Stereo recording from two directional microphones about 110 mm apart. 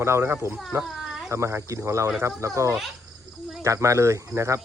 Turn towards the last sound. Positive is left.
turn(degrees=-25)  # may be behind; listen again after turning